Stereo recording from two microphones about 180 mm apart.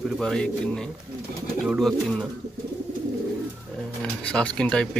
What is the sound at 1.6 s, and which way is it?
Speech, centre (ahead or behind).